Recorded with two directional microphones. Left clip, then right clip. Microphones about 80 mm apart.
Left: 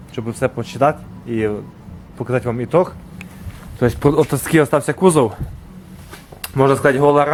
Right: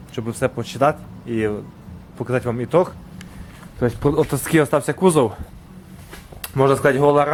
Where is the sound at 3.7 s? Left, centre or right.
Left.